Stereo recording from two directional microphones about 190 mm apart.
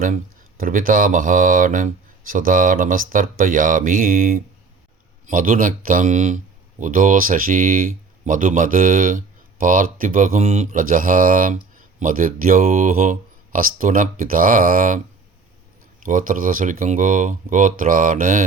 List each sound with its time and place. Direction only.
0.0 s speech: 45° right (ahead or behind)